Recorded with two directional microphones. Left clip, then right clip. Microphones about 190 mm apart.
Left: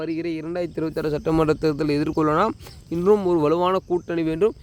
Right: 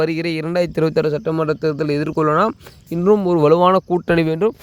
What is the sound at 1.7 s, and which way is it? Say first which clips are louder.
Speech: right 3 dB; 15° right (ahead or behind).